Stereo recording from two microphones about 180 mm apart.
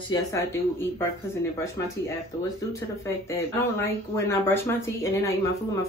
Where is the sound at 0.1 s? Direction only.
15° left (ahead or behind).